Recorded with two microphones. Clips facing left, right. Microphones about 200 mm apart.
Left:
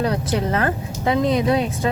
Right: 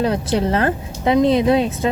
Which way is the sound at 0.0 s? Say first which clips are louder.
Right 3 dB; 25° right (ahead or behind).